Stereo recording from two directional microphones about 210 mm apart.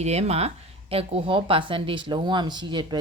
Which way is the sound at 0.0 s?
30° right (ahead or behind).